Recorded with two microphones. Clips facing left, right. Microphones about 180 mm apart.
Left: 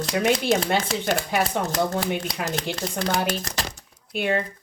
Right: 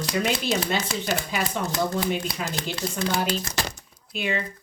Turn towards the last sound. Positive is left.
turn(degrees=55)  # may be behind; listen again after turning